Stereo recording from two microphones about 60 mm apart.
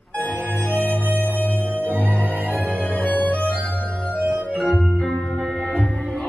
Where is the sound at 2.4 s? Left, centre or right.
Left.